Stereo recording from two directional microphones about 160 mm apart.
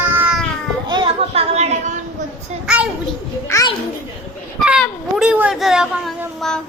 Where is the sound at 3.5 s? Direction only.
20° left (ahead or behind).